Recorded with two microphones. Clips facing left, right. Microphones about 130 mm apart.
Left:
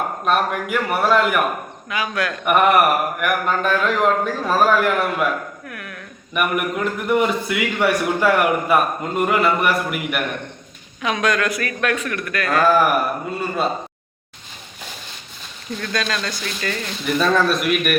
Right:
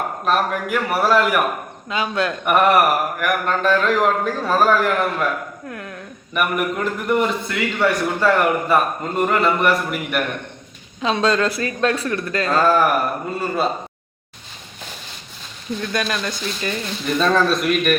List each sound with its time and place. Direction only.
0.3 s a man's voice: centre (ahead or behind)
1.9 s speech: 25° right (ahead or behind)
2.4 s a man's voice: centre (ahead or behind)
5.6 s speech: 25° right (ahead or behind)
6.3 s a man's voice: centre (ahead or behind)
11.0 s speech: 30° right (ahead or behind)
12.6 s a man's voice: 5° left (ahead or behind)
15.8 s speech: 20° right (ahead or behind)
17.2 s a man's voice: 5° left (ahead or behind)